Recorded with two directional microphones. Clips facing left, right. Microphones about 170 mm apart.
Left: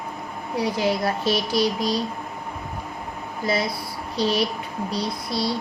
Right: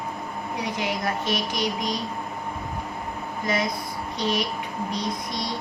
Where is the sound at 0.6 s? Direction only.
35° left (ahead or behind).